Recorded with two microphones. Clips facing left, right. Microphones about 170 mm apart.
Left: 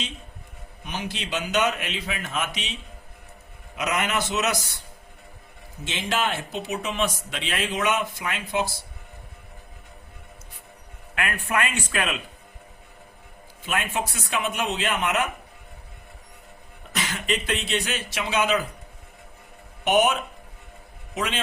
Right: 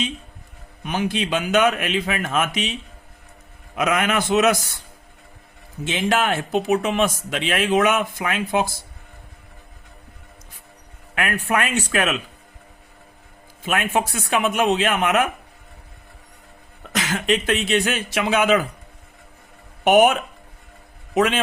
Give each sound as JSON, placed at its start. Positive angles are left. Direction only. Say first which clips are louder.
{"t": 0.9, "sound": "a man's voice", "louder": "right 9 dB", "side_deg": -55}
{"t": 3.8, "sound": "a man's voice", "louder": "right 5 dB", "side_deg": -55}
{"t": 5.8, "sound": "a man's voice", "louder": "right 6 dB", "side_deg": -50}
{"t": 11.1, "sound": "speech", "louder": "right 4 dB", "side_deg": -40}
{"t": 13.7, "sound": "a man's voice", "louder": "right 6 dB", "side_deg": -50}
{"t": 16.9, "sound": "a sound", "louder": "right 6 dB", "side_deg": -90}
{"t": 17.2, "sound": "a man's voice", "louder": "right 7 dB", "side_deg": -45}
{"t": 19.8, "sound": "speech", "louder": "right 6 dB", "side_deg": -50}